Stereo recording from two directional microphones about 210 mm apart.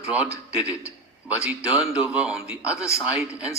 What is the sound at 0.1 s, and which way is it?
A man's voice, 5° right (ahead or behind).